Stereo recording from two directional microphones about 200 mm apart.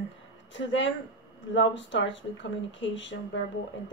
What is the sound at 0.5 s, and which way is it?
Speech, 65° left (ahead or behind).